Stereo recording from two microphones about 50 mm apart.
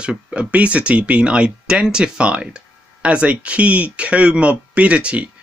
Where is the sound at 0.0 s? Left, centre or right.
Right.